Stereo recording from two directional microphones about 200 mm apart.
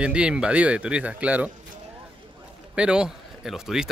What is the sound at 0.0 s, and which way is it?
Speech, 5° right (ahead or behind).